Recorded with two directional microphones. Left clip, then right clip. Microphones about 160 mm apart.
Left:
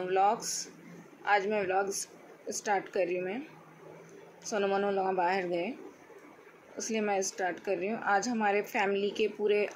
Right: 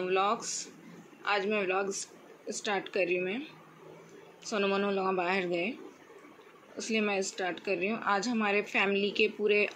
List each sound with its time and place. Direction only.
0.0 s a woman's voice: 30° right (ahead or behind)
4.5 s a woman's voice: 25° right (ahead or behind)
6.8 s a woman's voice: 25° right (ahead or behind)